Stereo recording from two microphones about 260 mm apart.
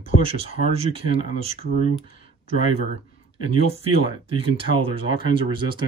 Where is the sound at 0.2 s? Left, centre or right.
Right.